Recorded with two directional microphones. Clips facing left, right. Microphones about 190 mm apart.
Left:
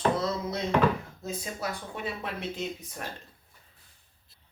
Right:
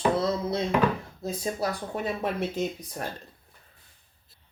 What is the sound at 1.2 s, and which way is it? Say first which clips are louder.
Speech: right 5 dB; 40° right (ahead or behind).